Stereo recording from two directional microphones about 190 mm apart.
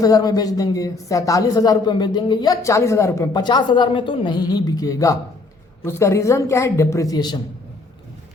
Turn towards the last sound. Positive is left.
turn(degrees=20)  # may be behind; listen again after turning